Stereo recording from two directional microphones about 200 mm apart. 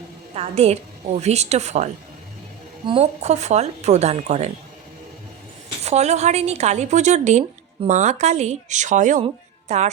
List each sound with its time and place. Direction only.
0.3 s a woman's voice: 30° right (ahead or behind)
5.8 s a woman's voice: 35° right (ahead or behind)